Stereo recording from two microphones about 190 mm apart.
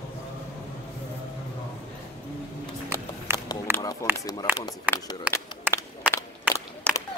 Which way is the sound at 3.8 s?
20° left (ahead or behind).